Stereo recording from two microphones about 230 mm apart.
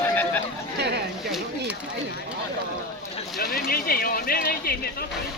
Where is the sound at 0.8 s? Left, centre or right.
Right.